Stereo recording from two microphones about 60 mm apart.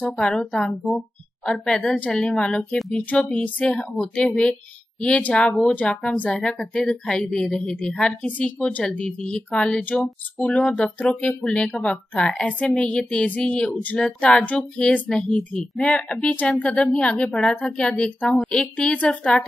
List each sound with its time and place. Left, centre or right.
0.0 s speech: centre